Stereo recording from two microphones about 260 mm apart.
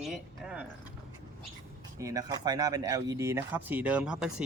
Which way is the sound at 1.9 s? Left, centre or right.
Centre.